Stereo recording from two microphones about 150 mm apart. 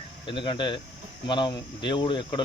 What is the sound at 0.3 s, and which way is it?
Speech, 30° left (ahead or behind).